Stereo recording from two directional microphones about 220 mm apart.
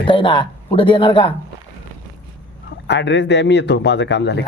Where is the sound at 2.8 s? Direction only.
50° left (ahead or behind).